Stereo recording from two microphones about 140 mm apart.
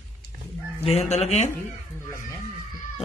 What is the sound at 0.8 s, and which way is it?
Speech, 50° left (ahead or behind).